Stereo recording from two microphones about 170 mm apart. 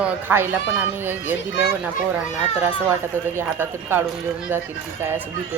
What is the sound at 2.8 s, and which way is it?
Speech, 10° right (ahead or behind).